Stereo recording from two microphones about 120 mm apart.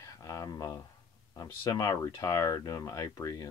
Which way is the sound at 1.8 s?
30° left (ahead or behind).